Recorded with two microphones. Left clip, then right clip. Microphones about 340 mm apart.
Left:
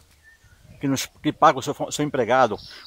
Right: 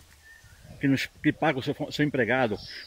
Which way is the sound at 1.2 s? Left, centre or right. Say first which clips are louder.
Left 11 dB; left.